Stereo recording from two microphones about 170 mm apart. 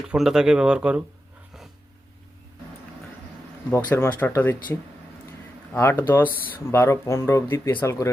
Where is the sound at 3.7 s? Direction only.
10° left (ahead or behind).